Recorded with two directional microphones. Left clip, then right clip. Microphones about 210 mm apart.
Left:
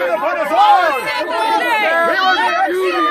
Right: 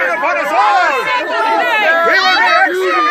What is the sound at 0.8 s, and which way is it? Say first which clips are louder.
Speech: right 3 dB; 45° right (ahead or behind).